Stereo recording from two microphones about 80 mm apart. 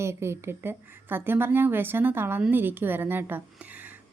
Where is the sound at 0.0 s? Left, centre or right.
Right.